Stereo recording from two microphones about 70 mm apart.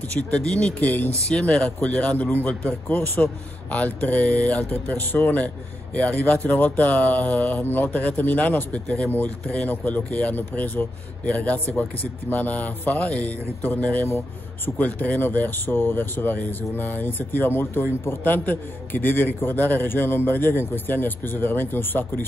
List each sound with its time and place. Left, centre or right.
0.3 s speech: centre
0.7 s speech: left
1.3 s a man's voice: centre; by 22.2 s left